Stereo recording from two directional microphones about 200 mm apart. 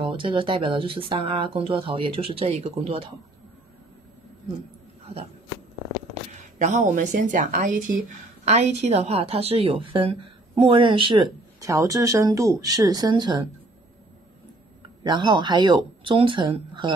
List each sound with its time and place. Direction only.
0.0 s speech: 25° right (ahead or behind)
6.6 s speech: 35° right (ahead or behind)
15.0 s speech: 20° right (ahead or behind)